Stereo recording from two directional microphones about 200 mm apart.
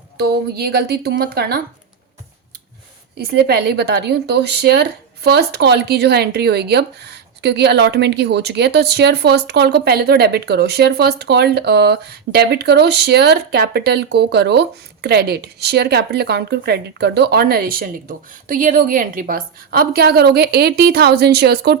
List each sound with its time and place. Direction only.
0.2 s speech: 50° right (ahead or behind)
3.2 s a woman's voice: 55° right (ahead or behind)